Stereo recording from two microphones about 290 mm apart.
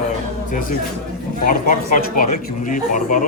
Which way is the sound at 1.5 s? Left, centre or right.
Left.